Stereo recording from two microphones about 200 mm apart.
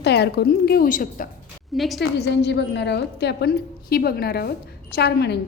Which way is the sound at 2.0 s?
55° left (ahead or behind).